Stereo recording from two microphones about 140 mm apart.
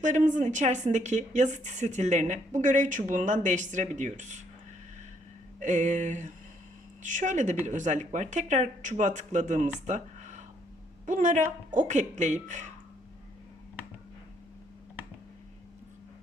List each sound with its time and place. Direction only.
0.3 s a woman's voice: 60° right (ahead or behind)
5.5 s a woman's voice: 65° right (ahead or behind)
9.8 s a sound: 60° right (ahead or behind)
11.0 s a woman's voice: 65° right (ahead or behind)